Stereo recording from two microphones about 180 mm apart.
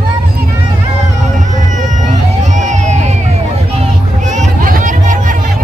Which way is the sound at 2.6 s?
40° right (ahead or behind).